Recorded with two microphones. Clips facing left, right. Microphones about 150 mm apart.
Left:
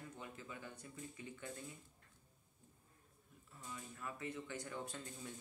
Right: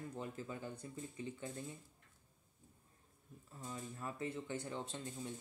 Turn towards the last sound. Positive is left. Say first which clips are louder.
# right 4 dB
turn(degrees=-25)  # may be behind; listen again after turning